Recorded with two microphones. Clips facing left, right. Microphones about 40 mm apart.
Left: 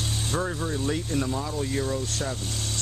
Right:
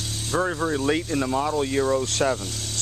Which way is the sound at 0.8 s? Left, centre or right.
Right.